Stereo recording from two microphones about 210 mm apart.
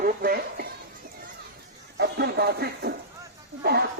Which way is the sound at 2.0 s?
50° right (ahead or behind).